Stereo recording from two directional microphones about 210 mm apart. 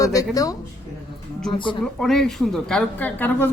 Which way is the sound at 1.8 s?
Centre (ahead or behind).